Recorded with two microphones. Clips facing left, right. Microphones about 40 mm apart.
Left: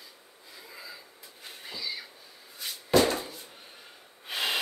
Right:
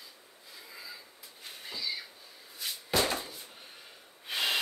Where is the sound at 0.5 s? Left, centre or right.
Centre.